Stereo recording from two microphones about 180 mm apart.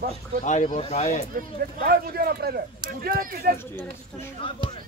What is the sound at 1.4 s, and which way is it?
Speech, 55° right (ahead or behind).